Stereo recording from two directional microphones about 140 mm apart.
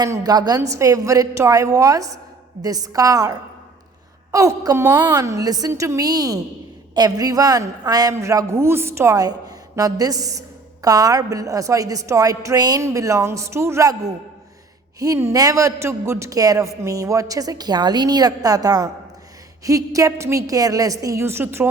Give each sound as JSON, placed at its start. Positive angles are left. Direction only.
{"t": 0.0, "sound": "a man's voice", "side_deg": -25}